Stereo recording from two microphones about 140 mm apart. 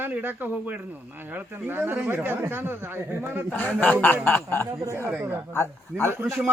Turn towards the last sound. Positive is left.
turn(degrees=-10)  # may be behind; listen again after turning